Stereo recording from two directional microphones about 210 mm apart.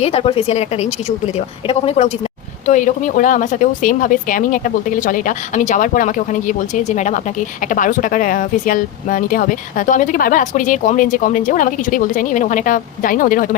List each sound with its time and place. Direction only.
0.0 s speech: 30° left (ahead or behind)